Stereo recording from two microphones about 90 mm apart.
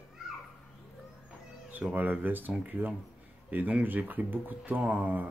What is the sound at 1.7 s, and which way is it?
Speech, 20° right (ahead or behind).